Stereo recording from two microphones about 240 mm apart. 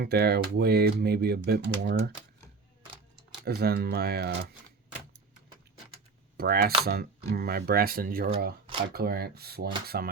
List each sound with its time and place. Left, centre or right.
0.0 s speech: right
3.4 s speech: right
6.3 s speech: right